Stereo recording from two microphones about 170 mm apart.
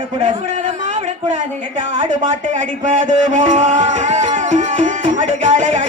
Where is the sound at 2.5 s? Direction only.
45° right (ahead or behind).